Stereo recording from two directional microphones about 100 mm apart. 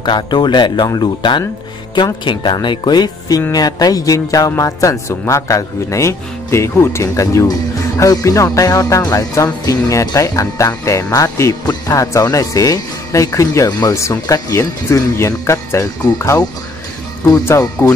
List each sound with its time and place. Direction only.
0.0 s speech: 50° left (ahead or behind)
3.5 s music: 40° left (ahead or behind)
13.7 s speech: 45° left (ahead or behind)
13.9 s speech: 30° left (ahead or behind)
17.8 s speech: 25° left (ahead or behind)